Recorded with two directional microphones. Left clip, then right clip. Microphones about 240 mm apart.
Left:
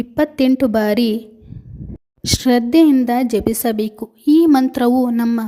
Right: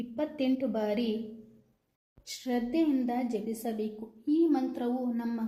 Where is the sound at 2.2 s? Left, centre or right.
Left.